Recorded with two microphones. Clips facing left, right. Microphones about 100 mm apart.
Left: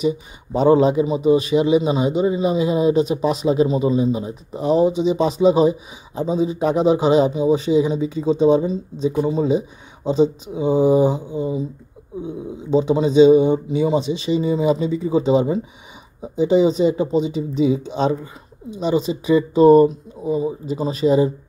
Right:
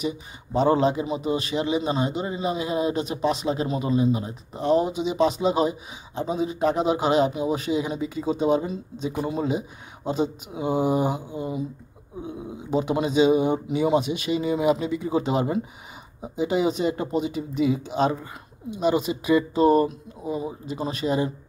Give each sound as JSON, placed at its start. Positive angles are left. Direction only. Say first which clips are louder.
{"t": 0.5, "sound": "speech", "louder": "left 6 dB", "side_deg": 5}
{"t": 12.7, "sound": "speech", "louder": "left 7 dB", "side_deg": -10}